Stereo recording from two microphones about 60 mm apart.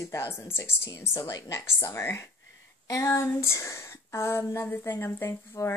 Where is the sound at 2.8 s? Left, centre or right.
Left.